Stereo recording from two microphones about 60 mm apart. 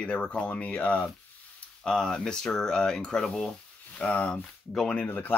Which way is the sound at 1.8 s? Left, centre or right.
Centre.